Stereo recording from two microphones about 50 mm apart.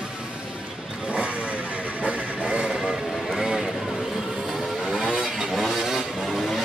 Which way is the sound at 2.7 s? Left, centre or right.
Centre.